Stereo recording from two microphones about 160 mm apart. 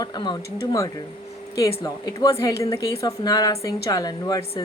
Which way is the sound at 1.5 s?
20° left (ahead or behind).